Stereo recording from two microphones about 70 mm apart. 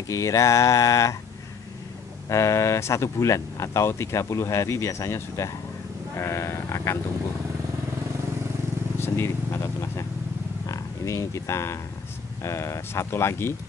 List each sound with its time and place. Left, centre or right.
0.1 s speech: left
2.2 s speech: left
8.9 s speech: left